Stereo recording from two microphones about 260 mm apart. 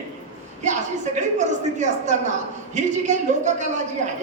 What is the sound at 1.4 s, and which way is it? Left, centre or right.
A woman's voice, right.